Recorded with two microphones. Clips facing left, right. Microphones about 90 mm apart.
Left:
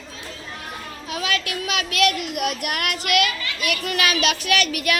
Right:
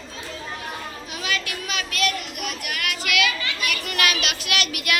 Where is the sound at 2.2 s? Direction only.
65° left (ahead or behind).